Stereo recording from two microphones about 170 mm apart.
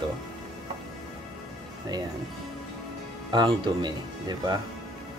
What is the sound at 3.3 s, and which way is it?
Speech, 25° right (ahead or behind).